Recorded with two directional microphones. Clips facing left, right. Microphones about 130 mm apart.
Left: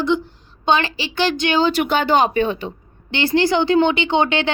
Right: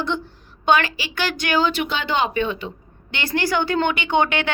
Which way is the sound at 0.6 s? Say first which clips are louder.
Even; 25° left (ahead or behind).